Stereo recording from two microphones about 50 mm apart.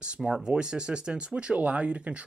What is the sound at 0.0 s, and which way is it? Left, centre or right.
Speech, centre.